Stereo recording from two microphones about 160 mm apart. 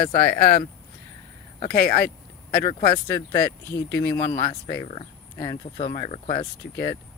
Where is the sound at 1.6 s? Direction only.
75° left (ahead or behind).